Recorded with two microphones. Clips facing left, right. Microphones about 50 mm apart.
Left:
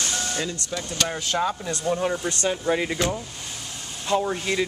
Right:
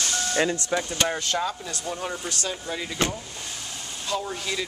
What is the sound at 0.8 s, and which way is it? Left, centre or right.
Speech, centre.